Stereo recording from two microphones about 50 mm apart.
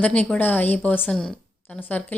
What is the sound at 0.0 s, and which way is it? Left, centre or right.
A woman's voice, left.